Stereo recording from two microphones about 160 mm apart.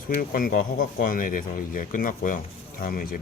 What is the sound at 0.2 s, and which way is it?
Speech, 60° left (ahead or behind).